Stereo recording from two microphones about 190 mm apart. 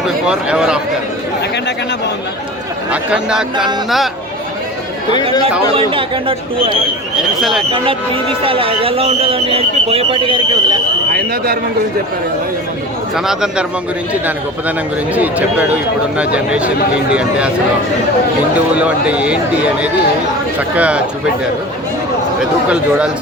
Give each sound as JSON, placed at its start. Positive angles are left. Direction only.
{"t": 0.3, "sound": "speech", "side_deg": -5}
{"t": 2.9, "sound": "speech", "side_deg": -5}
{"t": 5.9, "sound": "speech", "side_deg": -30}
{"t": 7.2, "sound": "speech", "side_deg": 0}
{"t": 7.7, "sound": "speech", "side_deg": -30}
{"t": 13.1, "sound": "speech", "side_deg": -5}
{"t": 15.1, "sound": "speech", "side_deg": -10}
{"t": 18.5, "sound": "speech", "side_deg": -5}
{"t": 20.6, "sound": "speech", "side_deg": -5}
{"t": 22.7, "sound": "speech", "side_deg": -5}